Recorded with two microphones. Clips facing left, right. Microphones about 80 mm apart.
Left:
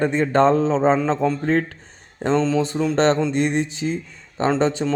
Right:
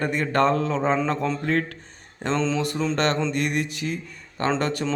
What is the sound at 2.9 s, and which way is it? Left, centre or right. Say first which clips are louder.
A man's voice: left 7 dB; left.